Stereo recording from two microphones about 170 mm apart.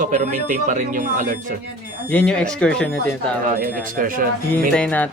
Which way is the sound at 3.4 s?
55° right (ahead or behind).